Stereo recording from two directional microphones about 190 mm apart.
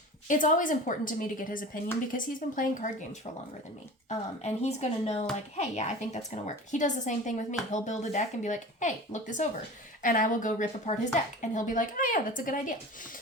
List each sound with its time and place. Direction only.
0.3 s a woman's voice: 45° left (ahead or behind)